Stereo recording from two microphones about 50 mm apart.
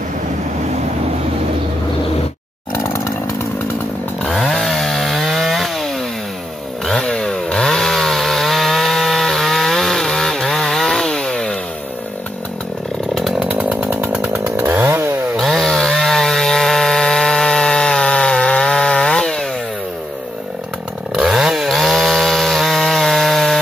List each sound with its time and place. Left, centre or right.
2.8 s chainsaw: left
4.3 s chainsaw: centre
13.5 s chainsaw: right
14.0 s chainsaw: right
15.4 s chainsaw: centre
21.2 s chainsaw: centre
21.6 s chainsaw: centre